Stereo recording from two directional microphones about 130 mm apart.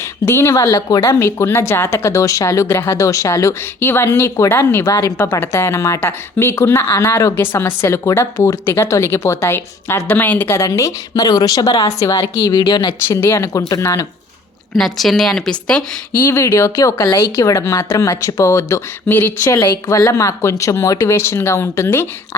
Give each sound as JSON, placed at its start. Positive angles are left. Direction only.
{"t": 0.3, "sound": "speech", "side_deg": 20}
{"t": 13.1, "sound": "speech", "side_deg": 20}
{"t": 14.8, "sound": "speech", "side_deg": 0}